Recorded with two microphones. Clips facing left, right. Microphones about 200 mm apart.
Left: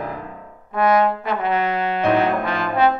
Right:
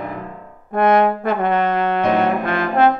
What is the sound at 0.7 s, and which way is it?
Trombone, 55° right (ahead or behind).